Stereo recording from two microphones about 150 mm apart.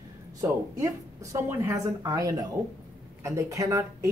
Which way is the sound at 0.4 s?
20° right (ahead or behind).